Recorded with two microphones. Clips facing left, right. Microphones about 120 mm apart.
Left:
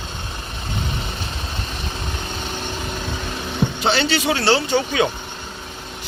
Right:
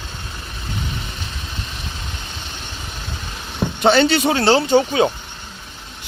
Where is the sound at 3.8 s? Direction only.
45° right (ahead or behind).